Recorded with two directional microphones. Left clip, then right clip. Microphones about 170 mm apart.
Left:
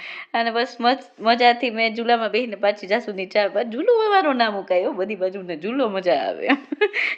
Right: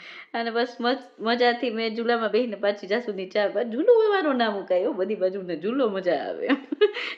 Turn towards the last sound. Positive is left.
turn(degrees=10)  # may be behind; listen again after turning